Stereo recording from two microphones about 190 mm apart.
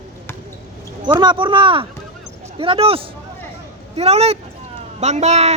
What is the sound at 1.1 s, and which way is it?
Speech, 25° right (ahead or behind).